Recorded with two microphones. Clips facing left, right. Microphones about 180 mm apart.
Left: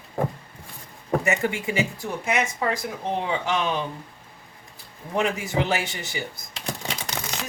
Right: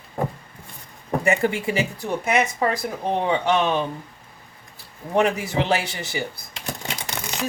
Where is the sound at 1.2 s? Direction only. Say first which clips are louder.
Right 4 dB; 35° right (ahead or behind).